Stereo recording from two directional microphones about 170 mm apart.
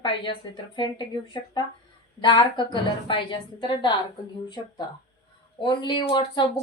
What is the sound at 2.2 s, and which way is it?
Speech, 30° left (ahead or behind).